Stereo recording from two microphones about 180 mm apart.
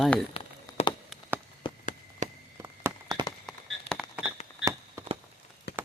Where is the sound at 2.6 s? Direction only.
20° right (ahead or behind).